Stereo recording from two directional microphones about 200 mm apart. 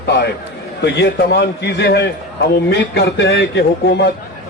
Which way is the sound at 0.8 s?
55° left (ahead or behind).